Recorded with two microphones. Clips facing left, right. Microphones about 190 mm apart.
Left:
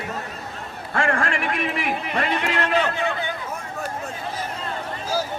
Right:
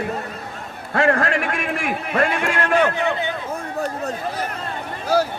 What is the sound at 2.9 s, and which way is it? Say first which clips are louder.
Speech: right 3 dB; 20° right (ahead or behind).